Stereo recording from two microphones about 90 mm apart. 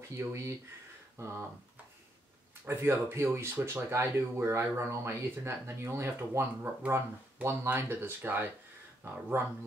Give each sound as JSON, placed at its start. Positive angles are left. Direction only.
{"t": 0.1, "sound": "speech", "side_deg": -35}
{"t": 2.6, "sound": "speech", "side_deg": -25}